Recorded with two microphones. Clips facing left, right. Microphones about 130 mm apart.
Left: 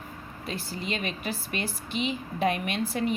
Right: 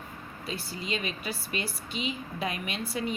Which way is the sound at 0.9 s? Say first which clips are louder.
Right 1 dB; 45° left (ahead or behind).